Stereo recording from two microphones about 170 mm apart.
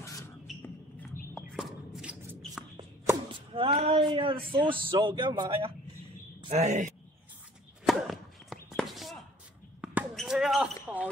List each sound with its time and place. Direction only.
0.0 s a sound: 15° left (ahead or behind)
0.5 s music: centre (ahead or behind)
1.5 s shuffle: centre (ahead or behind)
2.8 s speech: 30° right (ahead or behind)
6.4 s speech: 40° right (ahead or behind)
7.8 s a sound: centre (ahead or behind)
9.8 s basketball bounce: 5° right (ahead or behind)